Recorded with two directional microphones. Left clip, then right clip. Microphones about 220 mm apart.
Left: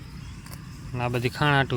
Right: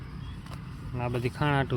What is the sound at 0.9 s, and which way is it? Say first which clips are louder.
Speech: left 5 dB; 15° left (ahead or behind).